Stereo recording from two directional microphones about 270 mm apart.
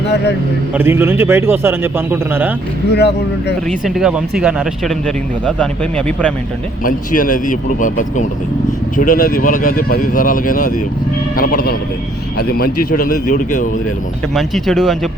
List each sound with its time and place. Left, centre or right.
0.7 s a man's voice: centre
2.9 s speech: left
3.7 s speech: centre
6.8 s speech: left
14.3 s speech: centre